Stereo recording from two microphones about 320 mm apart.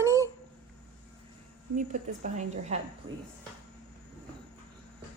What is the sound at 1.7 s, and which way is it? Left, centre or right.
A woman's voice, right.